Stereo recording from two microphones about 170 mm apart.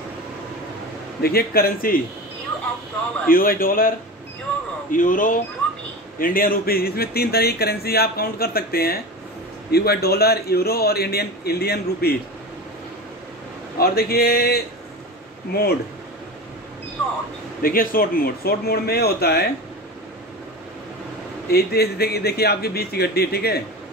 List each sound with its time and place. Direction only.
1.2 s speech: 65° left (ahead or behind)
3.3 s speech: 60° left (ahead or behind)
4.9 s speech: 50° left (ahead or behind)
5.6 s a sound: 5° left (ahead or behind)
6.1 s a man's voice: 55° left (ahead or behind)
13.7 s speech: 65° left (ahead or behind)
17.6 s speech: 60° left (ahead or behind)
21.5 s a man's voice: 65° left (ahead or behind)